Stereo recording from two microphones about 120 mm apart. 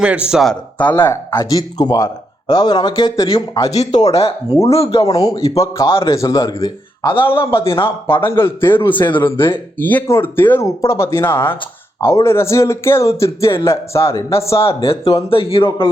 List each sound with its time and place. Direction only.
0.0 s speech: 10° right (ahead or behind)
0.8 s speech: 15° left (ahead or behind); by 3.2 s 35° left (ahead or behind)
3.2 s speech: 50° left (ahead or behind); by 4.0 s 65° left (ahead or behind)
4.1 s speech: 55° left (ahead or behind)
5.0 s speech: 30° left (ahead or behind)
6.7 s speech: 40° left (ahead or behind)
7.9 s speech: 20° left (ahead or behind)
14.8 s speech: 50° left (ahead or behind)